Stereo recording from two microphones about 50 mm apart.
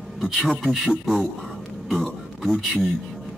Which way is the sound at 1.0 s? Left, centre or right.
Centre.